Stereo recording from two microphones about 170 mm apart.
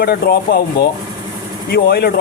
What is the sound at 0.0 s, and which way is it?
A man's voice, 60° left (ahead or behind).